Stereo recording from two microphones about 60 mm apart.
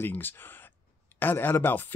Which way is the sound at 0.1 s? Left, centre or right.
Left.